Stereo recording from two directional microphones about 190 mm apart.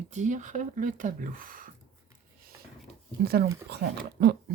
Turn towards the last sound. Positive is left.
turn(degrees=-60)  # may be behind; listen again after turning